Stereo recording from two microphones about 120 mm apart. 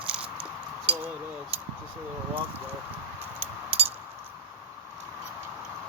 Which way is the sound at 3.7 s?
15° right (ahead or behind).